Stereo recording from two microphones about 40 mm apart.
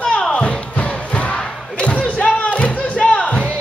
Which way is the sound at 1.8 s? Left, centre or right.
Left.